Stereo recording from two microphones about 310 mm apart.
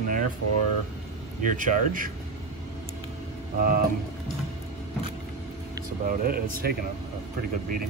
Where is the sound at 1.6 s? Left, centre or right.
Right.